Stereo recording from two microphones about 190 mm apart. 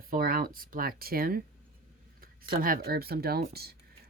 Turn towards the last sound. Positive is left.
turn(degrees=-55)  # may be behind; listen again after turning